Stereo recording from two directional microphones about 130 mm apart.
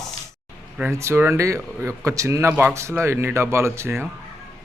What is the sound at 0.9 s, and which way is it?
Speech, 20° right (ahead or behind).